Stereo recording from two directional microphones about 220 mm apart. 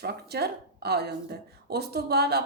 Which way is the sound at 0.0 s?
45° right (ahead or behind).